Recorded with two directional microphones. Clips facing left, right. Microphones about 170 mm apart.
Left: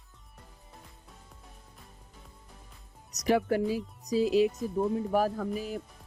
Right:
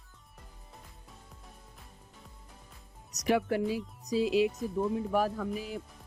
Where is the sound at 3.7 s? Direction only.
45° left (ahead or behind).